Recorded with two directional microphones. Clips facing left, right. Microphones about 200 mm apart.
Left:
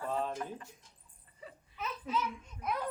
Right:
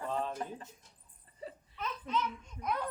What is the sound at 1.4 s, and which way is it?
Laughter, 35° right (ahead or behind).